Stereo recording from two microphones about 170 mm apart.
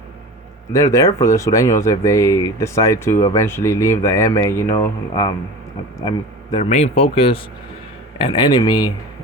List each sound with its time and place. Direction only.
0.7 s a man's voice: 20° left (ahead or behind)
6.7 s speech: 40° left (ahead or behind); by 8.9 s 25° left (ahead or behind)